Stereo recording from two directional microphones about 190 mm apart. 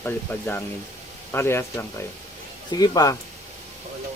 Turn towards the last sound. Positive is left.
turn(degrees=20)  # may be behind; listen again after turning